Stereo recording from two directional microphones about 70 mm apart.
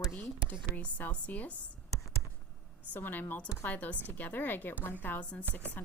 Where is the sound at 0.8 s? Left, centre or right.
Left.